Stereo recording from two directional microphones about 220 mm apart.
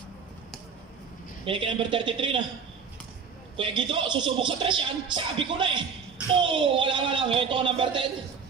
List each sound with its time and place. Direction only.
1.4 s speech: 25° right (ahead or behind)
3.5 s speech: 25° right (ahead or behind)